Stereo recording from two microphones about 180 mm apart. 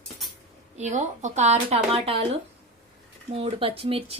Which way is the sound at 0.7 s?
40° right (ahead or behind).